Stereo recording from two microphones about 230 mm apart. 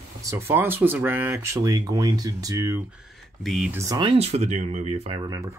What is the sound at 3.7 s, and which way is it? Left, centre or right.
Speech, centre.